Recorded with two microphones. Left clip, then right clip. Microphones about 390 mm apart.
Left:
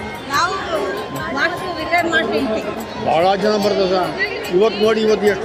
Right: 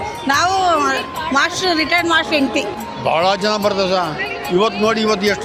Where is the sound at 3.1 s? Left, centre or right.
Right.